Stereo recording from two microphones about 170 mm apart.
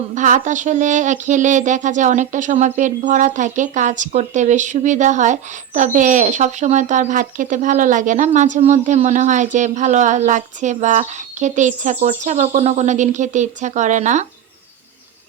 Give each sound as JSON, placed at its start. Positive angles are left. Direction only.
{"t": 0.1, "sound": "speech", "side_deg": -50}